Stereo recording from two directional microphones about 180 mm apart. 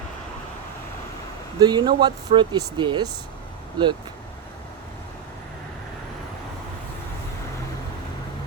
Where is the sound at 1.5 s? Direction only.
25° right (ahead or behind).